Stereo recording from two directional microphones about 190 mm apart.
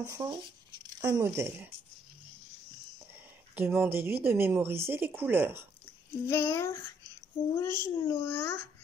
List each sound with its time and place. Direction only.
0.0 s speech: 15° right (ahead or behind)
3.5 s speech: 10° right (ahead or behind)
6.2 s a child's voice: 15° left (ahead or behind)